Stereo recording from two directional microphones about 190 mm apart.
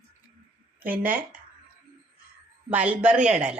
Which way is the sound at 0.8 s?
50° right (ahead or behind).